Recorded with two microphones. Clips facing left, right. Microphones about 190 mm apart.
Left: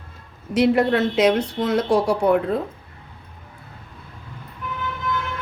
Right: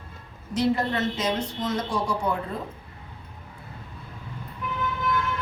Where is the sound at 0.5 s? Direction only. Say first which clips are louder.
Left 7 dB; 70° left (ahead or behind).